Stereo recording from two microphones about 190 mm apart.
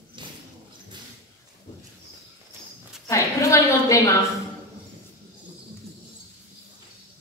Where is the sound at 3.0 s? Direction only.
15° left (ahead or behind).